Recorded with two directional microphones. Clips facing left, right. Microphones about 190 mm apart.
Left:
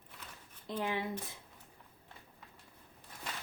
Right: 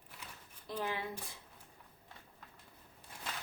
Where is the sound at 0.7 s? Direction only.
20° left (ahead or behind).